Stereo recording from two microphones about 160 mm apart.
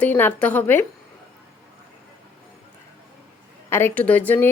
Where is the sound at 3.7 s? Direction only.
15° left (ahead or behind).